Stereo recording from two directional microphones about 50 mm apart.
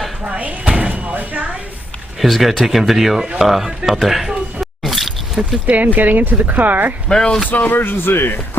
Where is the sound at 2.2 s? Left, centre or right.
Centre.